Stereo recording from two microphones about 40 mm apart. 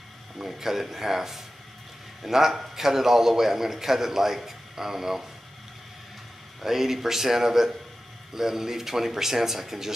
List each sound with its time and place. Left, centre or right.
0.4 s a man's voice: centre
6.6 s a man's voice: centre